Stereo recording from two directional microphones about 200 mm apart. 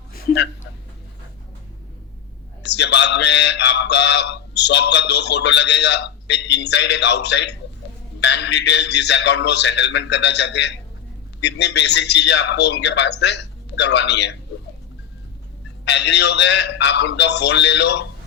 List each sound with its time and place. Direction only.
2.6 s speech: 60° left (ahead or behind)
15.8 s speech: 60° left (ahead or behind)